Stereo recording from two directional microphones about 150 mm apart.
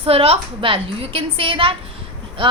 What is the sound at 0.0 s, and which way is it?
A woman's voice, 40° right (ahead or behind).